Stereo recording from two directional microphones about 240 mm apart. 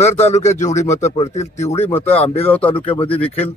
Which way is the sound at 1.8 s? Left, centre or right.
Centre.